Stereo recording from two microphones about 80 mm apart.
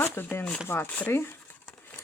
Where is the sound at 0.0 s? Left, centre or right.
Left.